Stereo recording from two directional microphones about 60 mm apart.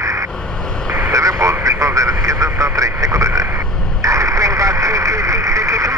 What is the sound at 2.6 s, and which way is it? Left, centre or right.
Radio, right.